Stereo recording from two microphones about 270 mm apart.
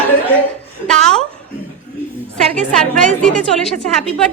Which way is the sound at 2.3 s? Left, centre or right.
Centre.